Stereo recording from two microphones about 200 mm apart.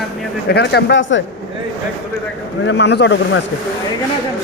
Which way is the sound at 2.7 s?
60° left (ahead or behind).